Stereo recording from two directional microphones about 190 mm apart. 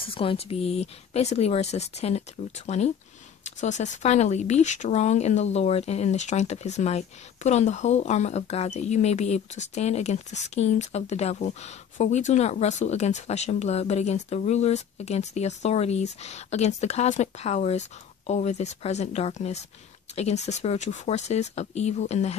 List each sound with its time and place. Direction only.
0.0 s speech: 30° left (ahead or behind)